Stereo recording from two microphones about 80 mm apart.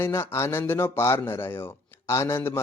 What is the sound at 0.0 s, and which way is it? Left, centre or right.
A man's voice, left.